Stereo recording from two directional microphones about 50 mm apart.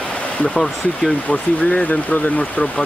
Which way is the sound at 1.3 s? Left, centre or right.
Left.